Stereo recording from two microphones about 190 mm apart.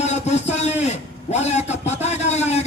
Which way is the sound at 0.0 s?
35° left (ahead or behind).